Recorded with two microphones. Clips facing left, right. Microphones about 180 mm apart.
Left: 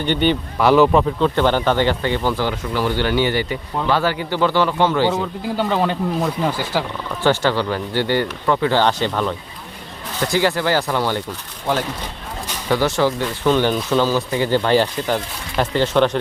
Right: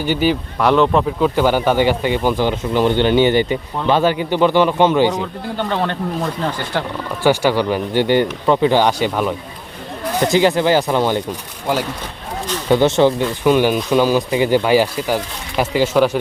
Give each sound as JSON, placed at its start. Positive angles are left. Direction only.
{"t": 0.0, "sound": "speech", "side_deg": -5}
{"t": 1.2, "sound": "speech", "side_deg": -10}
{"t": 5.2, "sound": "speech", "side_deg": 5}
{"t": 7.2, "sound": "speech", "side_deg": -10}